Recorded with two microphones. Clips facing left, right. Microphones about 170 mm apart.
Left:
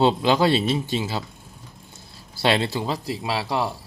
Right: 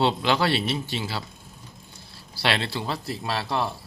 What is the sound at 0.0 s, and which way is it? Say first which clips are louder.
A man's voice: left 4 dB; 20° left (ahead or behind).